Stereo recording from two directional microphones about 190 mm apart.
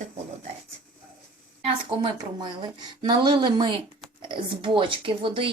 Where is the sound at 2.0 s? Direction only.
25° right (ahead or behind).